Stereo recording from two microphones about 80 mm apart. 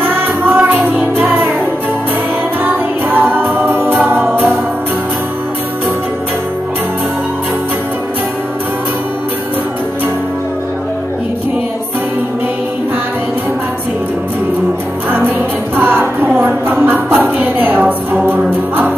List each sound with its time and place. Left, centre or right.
0.0 s music: right
2.6 s music: right
3.9 s music: centre
15.0 s music: right
16.3 s a sound: right